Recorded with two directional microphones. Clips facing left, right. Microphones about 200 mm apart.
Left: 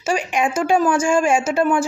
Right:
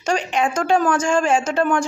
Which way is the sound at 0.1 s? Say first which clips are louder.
Even; 10° left (ahead or behind).